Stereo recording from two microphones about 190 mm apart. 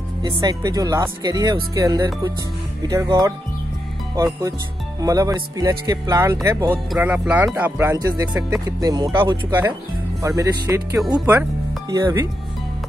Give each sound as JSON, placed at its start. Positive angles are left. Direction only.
{"t": 0.2, "sound": "speech", "side_deg": -20}